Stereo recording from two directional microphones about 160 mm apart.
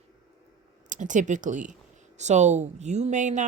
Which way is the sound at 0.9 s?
50° right (ahead or behind).